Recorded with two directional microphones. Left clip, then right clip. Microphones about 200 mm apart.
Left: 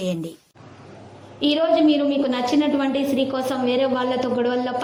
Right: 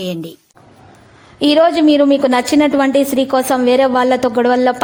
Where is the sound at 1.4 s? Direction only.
45° right (ahead or behind).